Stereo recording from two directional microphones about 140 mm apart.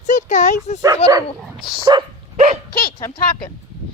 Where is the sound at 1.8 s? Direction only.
30° right (ahead or behind).